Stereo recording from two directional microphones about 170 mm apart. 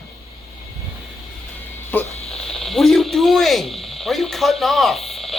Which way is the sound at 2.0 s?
35° left (ahead or behind).